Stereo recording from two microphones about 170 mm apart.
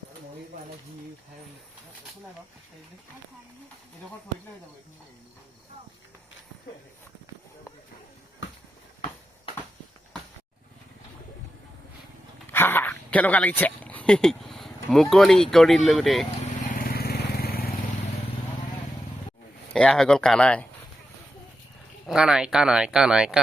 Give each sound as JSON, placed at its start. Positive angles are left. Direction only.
{"t": 8.4, "sound": "basketball bounce", "side_deg": 90}
{"t": 12.5, "sound": "speech", "side_deg": 15}
{"t": 16.6, "sound": "vehicle", "side_deg": 55}
{"t": 19.7, "sound": "speech", "side_deg": 5}
{"t": 22.0, "sound": "speech", "side_deg": -5}